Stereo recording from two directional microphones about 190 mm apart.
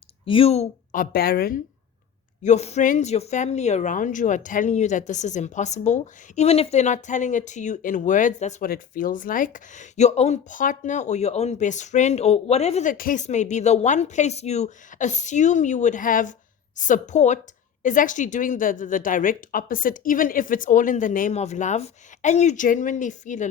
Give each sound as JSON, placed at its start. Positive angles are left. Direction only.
{"t": 0.3, "sound": "a woman's voice", "side_deg": 30}
{"t": 1.1, "sound": "a woman's voice", "side_deg": 55}
{"t": 2.4, "sound": "speech", "side_deg": 35}
{"t": 8.7, "sound": "a woman's voice", "side_deg": 50}